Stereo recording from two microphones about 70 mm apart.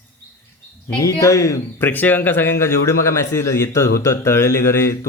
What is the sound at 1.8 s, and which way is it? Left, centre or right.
Speech, left.